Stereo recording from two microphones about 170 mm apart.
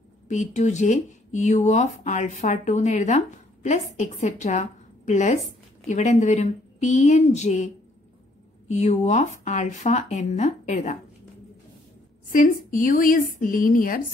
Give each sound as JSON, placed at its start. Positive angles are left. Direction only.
{"t": 0.3, "sound": "speech", "side_deg": 45}
{"t": 12.3, "sound": "speech", "side_deg": 50}